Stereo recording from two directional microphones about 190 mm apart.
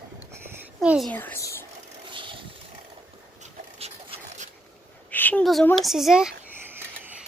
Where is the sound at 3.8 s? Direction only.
35° right (ahead or behind).